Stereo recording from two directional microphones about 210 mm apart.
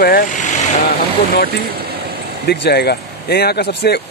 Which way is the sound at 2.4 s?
50° left (ahead or behind).